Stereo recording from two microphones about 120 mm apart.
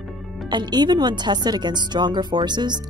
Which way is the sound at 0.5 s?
35° right (ahead or behind).